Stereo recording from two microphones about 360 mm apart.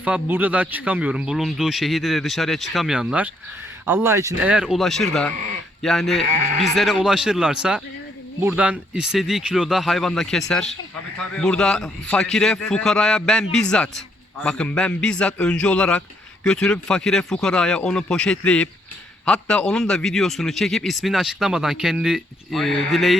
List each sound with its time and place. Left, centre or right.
0.0 s a man's voice: centre
6.2 s speech: centre
6.7 s a man's voice: centre